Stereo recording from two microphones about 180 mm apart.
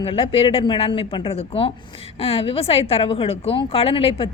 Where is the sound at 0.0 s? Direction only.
30° left (ahead or behind).